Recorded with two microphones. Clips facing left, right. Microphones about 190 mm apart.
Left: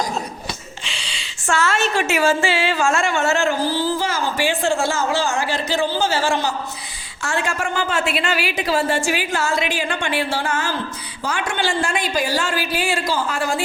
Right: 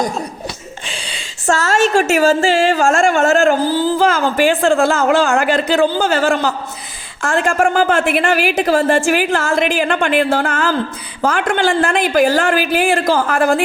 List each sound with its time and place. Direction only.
0.9 s a man's voice: 50° right (ahead or behind)